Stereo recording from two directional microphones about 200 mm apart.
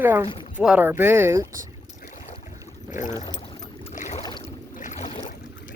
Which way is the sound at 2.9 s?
40° left (ahead or behind).